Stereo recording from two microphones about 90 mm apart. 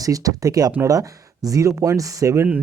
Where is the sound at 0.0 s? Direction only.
40° right (ahead or behind).